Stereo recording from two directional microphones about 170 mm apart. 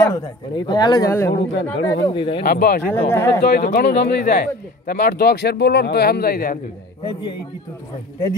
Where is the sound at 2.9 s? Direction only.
15° left (ahead or behind).